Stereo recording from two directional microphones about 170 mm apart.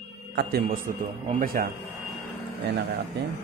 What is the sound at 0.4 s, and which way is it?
Speech, 70° right (ahead or behind).